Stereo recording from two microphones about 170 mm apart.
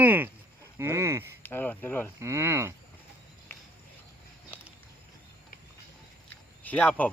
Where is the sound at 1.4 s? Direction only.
10° left (ahead or behind).